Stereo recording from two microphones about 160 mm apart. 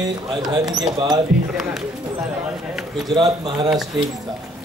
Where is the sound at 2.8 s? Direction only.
Centre (ahead or behind).